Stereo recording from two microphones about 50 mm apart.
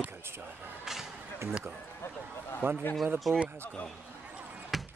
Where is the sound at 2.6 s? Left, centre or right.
Right.